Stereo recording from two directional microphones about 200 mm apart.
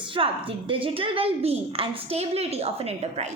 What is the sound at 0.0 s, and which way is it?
A woman's voice, 25° right (ahead or behind).